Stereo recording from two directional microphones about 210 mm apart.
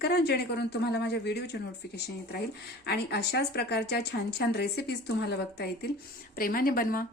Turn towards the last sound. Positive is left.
turn(degrees=45)  # may be behind; listen again after turning